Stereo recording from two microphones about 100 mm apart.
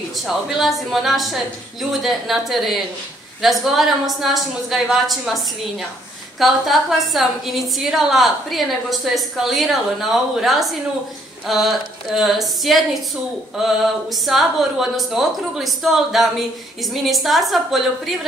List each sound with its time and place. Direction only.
0.5 s a woman's voice: centre (ahead or behind)